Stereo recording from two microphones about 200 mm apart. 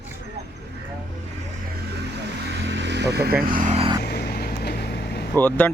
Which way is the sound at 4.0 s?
50° left (ahead or behind).